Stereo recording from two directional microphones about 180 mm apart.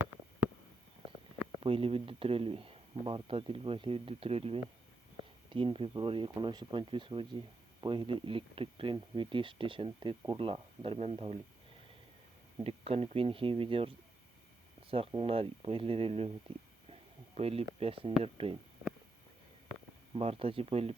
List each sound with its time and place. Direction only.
1.6 s speech: 30° right (ahead or behind)
12.5 s speech: 35° right (ahead or behind)
17.3 s speech: 35° right (ahead or behind)
20.1 s speech: 30° right (ahead or behind)